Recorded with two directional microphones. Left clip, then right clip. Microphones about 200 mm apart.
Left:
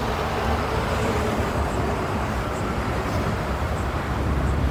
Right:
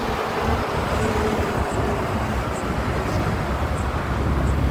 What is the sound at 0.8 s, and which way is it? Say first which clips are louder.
Vehicle: right 2 dB; 50° left (ahead or behind).